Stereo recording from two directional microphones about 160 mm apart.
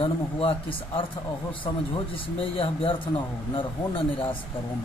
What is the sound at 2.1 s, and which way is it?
Speech, 35° left (ahead or behind).